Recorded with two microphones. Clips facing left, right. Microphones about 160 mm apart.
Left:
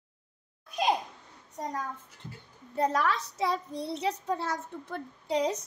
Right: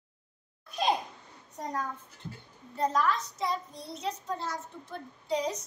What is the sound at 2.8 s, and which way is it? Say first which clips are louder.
A child's voice: left 1 dB; 70° left (ahead or behind).